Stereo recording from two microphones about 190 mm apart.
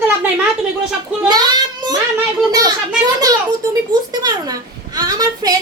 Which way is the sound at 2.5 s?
20° right (ahead or behind).